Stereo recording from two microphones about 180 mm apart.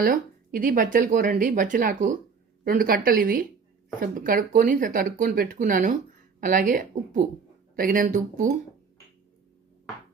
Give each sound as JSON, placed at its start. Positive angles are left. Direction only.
{"t": 0.0, "sound": "speech", "side_deg": -50}